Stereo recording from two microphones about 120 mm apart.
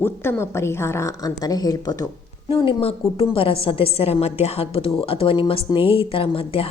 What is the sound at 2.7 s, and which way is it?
A woman's voice, 50° left (ahead or behind).